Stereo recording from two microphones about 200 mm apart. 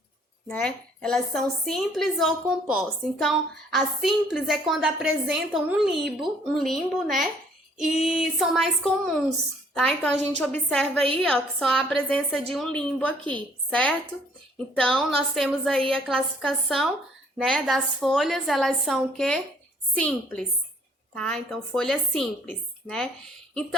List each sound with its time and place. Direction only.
0.4 s a woman's voice: 5° left (ahead or behind)